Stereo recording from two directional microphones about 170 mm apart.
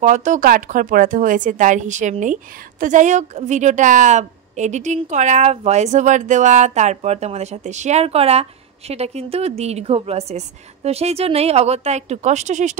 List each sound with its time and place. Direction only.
0.0 s a woman's voice: 45° right (ahead or behind)